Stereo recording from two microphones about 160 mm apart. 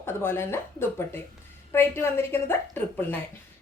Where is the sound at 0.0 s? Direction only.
15° left (ahead or behind).